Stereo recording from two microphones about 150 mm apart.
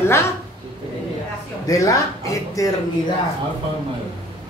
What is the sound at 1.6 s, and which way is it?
Speech, 20° left (ahead or behind).